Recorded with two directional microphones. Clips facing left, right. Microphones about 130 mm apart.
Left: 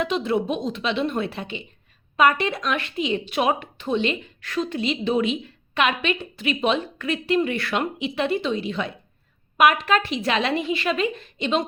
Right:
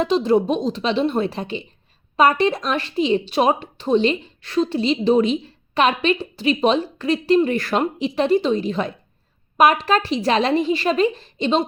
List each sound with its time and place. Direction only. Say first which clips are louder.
0.0 s speech: right 6 dB; 35° right (ahead or behind)